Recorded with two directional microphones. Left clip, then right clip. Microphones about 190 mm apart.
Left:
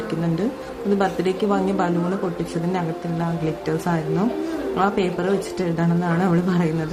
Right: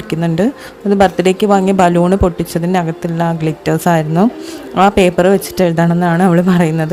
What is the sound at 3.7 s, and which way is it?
A woman's voice, 50° right (ahead or behind).